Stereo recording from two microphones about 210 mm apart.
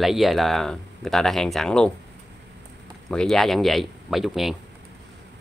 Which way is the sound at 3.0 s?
Centre (ahead or behind).